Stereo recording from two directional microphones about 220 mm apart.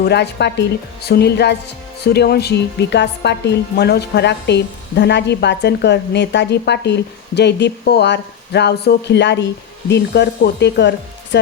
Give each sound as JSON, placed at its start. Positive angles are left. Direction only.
{"t": 0.0, "sound": "a woman's voice", "side_deg": 50}